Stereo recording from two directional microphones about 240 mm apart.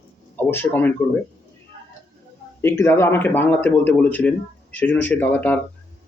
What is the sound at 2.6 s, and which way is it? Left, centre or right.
Speech, centre.